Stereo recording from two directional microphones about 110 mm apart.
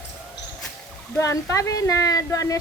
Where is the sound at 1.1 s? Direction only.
30° left (ahead or behind).